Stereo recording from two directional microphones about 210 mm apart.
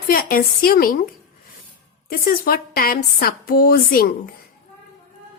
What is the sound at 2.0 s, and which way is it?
A woman's voice, 45° left (ahead or behind).